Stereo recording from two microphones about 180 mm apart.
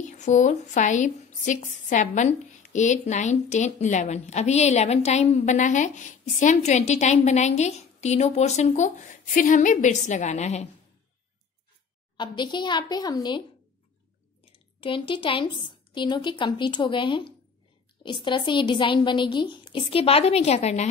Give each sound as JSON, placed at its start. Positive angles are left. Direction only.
{"t": 0.0, "sound": "a woman's voice", "side_deg": 40}
{"t": 12.2, "sound": "a woman's voice", "side_deg": 25}
{"t": 14.4, "sound": "a woman's voice", "side_deg": 30}